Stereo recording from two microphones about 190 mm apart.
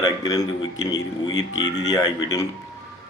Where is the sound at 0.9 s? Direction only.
80° left.